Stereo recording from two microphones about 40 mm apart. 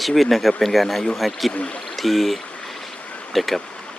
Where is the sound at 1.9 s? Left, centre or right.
Centre.